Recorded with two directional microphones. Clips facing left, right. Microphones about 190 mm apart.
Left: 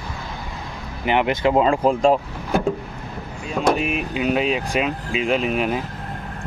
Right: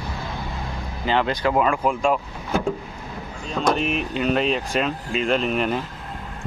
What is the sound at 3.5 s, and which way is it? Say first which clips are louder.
Speech: left 2 dB; 5° left (ahead or behind).